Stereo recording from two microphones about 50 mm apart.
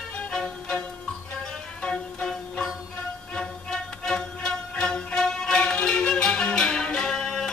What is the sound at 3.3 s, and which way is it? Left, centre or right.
Music, centre.